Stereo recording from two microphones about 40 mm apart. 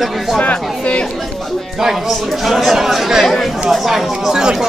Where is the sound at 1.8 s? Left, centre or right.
Centre.